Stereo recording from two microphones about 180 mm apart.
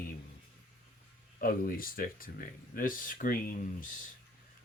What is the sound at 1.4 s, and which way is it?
Speech, 50° left (ahead or behind).